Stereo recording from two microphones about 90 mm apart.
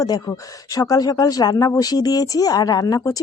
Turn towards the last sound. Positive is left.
turn(degrees=45)  # may be behind; listen again after turning